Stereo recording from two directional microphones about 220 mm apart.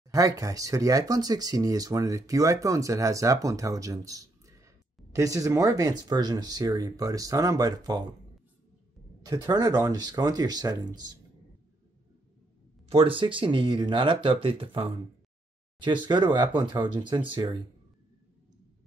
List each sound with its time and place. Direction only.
0.1 s speech: 15° right (ahead or behind)
9.2 s speech: 15° right (ahead or behind)
12.9 s speech: 25° right (ahead or behind)